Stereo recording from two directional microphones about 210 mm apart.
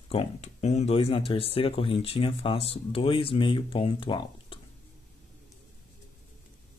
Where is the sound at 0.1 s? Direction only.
30° left (ahead or behind).